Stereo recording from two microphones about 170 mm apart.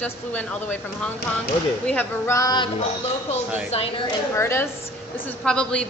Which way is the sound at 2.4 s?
25° left (ahead or behind).